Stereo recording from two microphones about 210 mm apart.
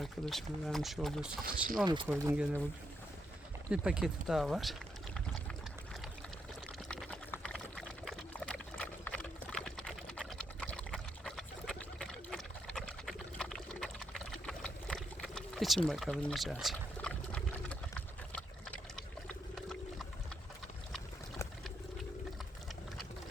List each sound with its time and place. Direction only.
0.0 s speech: centre (ahead or behind)
1.8 s speech: 20° right (ahead or behind)
2.0 s speech: 5° right (ahead or behind)
3.7 s speech: 5° right (ahead or behind)
6.8 s a sound: 5° left (ahead or behind)
15.9 s pour: centre (ahead or behind)
18.3 s water: 5° left (ahead or behind)
19.3 s wild animals: centre (ahead or behind)